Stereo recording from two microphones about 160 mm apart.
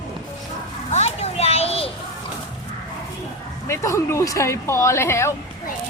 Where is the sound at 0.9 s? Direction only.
40° left (ahead or behind).